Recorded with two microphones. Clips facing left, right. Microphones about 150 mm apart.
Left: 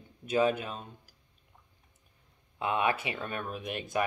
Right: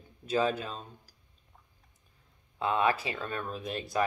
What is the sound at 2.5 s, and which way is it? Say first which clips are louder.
Speech: right 2 dB; 15° left (ahead or behind).